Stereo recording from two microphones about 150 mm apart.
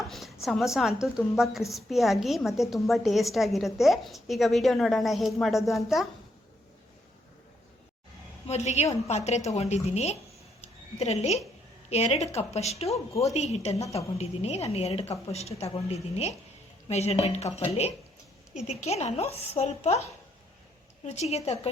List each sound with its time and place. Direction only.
0.0 s a sound: centre (ahead or behind)
0.4 s a woman's voice: centre (ahead or behind)
8.4 s a woman's voice: 45° left (ahead or behind)
10.6 s a sound: 45° left (ahead or behind)
11.9 s a woman's voice: 45° left (ahead or behind)
18.7 s a woman's voice: 45° left (ahead or behind)